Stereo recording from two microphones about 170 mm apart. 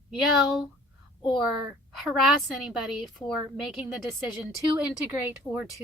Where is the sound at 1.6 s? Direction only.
Centre (ahead or behind).